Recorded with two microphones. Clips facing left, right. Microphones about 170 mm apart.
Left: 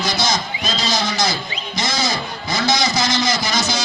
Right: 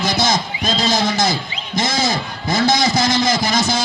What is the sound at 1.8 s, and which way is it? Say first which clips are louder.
Music: right 3 dB; 50° right (ahead or behind).